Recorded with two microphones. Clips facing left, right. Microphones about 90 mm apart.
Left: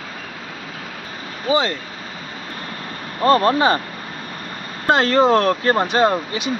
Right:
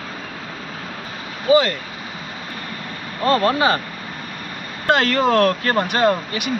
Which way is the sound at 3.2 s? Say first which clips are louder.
Left 3 dB; 30° left (ahead or behind).